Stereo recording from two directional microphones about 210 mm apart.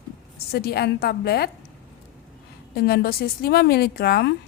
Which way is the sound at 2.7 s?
50° left (ahead or behind).